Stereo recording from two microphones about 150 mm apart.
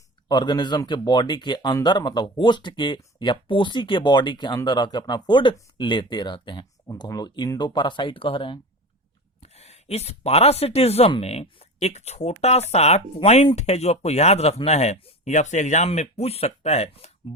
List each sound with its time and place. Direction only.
0.3 s speech: 30° left (ahead or behind); by 17.1 s 45° left (ahead or behind)